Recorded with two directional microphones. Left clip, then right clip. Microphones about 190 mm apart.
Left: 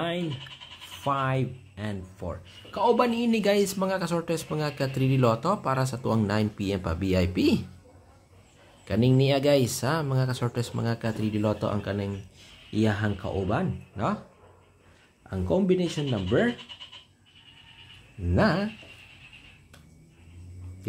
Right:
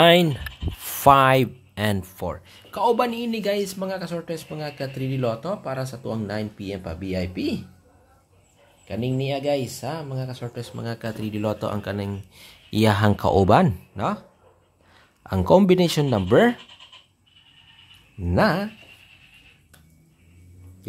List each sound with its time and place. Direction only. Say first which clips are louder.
0.0 s speech: right 15 dB; 50° right (ahead or behind); by 3.1 s 20° right (ahead or behind)
3.1 s speech: left 1 dB; 5° right (ahead or behind); by 7.6 s 15° left (ahead or behind)
8.8 s speech: left 3 dB; 15° left (ahead or behind)
10.8 s speech: right 1 dB; 5° right (ahead or behind); by 12.2 s 25° right (ahead or behind)
12.4 s speech: right 6 dB; 50° right (ahead or behind)
13.9 s speech: right 2 dB; 20° right (ahead or behind)
15.2 s speech: right 9 dB; 55° right (ahead or behind)
18.3 s speech: right 4 dB; 25° right (ahead or behind)